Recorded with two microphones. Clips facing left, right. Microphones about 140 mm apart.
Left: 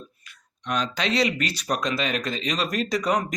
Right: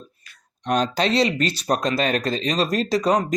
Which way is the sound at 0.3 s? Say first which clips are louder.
Right 6 dB; 35° right (ahead or behind).